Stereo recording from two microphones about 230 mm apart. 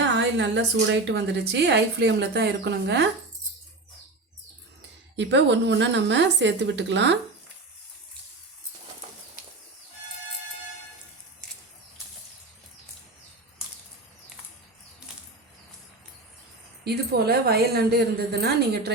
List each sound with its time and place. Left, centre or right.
0.0 s a woman's voice: right
5.1 s a woman's voice: right
16.8 s a woman's voice: right